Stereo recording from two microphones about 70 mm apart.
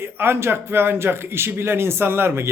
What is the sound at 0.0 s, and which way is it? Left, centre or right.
A man's voice, right.